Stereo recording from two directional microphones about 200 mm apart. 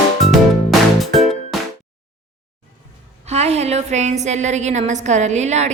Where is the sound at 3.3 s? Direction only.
30° right (ahead or behind).